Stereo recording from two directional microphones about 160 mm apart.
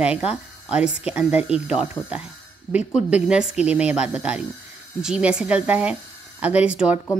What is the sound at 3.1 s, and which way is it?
Speech, 5° right (ahead or behind).